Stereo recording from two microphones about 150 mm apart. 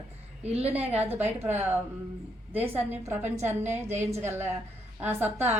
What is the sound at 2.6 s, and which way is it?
A woman's voice, 15° right (ahead or behind).